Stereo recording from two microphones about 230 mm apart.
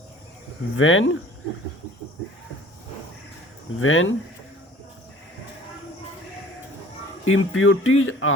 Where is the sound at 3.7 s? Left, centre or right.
Left.